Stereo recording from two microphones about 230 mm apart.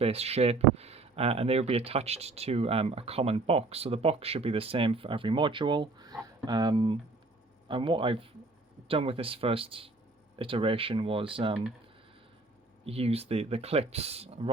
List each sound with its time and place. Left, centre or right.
0.0 s speech: right
12.8 s speech: right